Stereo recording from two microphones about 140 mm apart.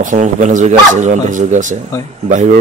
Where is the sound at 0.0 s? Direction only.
60° right (ahead or behind).